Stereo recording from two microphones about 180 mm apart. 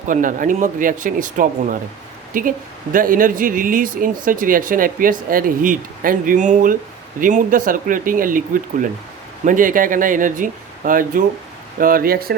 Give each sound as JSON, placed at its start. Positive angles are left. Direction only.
{"t": 0.1, "sound": "speech", "side_deg": -45}